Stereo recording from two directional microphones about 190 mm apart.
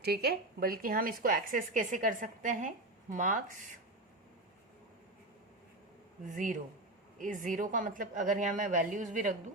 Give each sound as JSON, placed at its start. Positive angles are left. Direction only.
{"t": 0.0, "sound": "speech", "side_deg": -55}
{"t": 6.2, "sound": "speech", "side_deg": -40}